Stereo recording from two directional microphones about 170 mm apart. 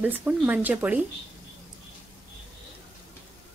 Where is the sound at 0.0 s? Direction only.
10° right (ahead or behind).